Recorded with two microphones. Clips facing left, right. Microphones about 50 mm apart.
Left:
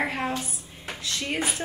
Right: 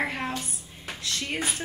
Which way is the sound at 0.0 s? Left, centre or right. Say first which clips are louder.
Left 2 dB; centre.